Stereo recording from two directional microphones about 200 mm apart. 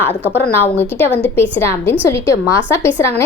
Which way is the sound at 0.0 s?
10° left (ahead or behind).